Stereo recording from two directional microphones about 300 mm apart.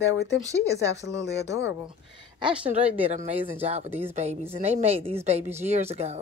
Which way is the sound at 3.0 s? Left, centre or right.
Right.